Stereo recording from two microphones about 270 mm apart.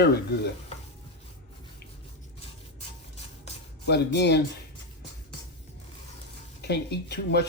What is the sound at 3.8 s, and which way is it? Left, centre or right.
Speech, left.